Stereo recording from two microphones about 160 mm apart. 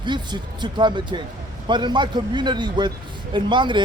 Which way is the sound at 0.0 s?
30° right (ahead or behind).